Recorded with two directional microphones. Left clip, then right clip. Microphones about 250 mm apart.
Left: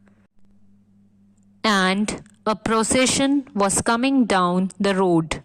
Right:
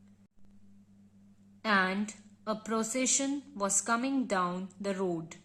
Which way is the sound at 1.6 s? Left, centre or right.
Left.